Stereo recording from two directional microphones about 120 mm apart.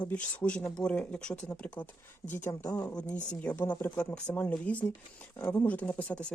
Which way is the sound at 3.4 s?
15° left (ahead or behind).